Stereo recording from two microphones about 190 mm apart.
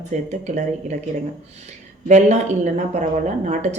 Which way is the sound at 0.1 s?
40° right (ahead or behind).